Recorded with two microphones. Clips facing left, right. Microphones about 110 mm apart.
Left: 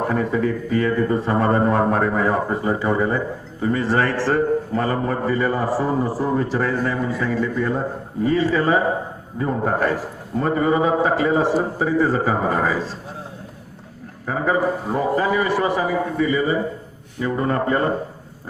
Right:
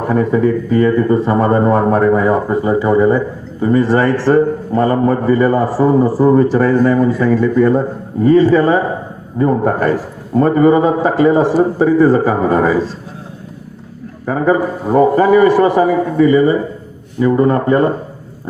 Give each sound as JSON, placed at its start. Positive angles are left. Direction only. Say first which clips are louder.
{"t": 0.1, "sound": "a man's voice", "louder": "right 8 dB", "side_deg": -35}
{"t": 14.3, "sound": "a man's voice", "louder": "right 6 dB", "side_deg": -40}
{"t": 15.8, "sound": "a man's voice", "louder": "right 9 dB", "side_deg": -40}